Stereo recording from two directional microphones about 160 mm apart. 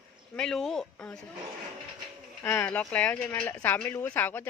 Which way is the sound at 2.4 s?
10° left (ahead or behind).